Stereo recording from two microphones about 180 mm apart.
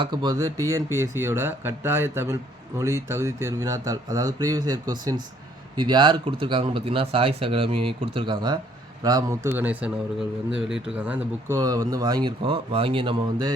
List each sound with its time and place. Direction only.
0.0 s speech: 25° right (ahead or behind)